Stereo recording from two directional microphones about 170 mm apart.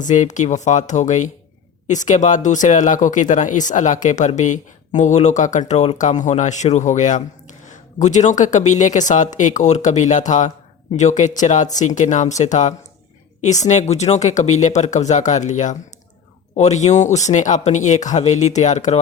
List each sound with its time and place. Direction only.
0.0 s speech: 45° left (ahead or behind)